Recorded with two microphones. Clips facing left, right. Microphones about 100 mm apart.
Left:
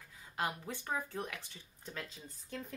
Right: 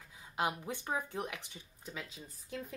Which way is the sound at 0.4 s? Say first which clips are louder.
Right 3 dB; 20° right (ahead or behind).